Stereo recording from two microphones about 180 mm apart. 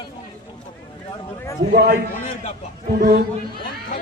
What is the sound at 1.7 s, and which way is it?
Speech, 60° right (ahead or behind).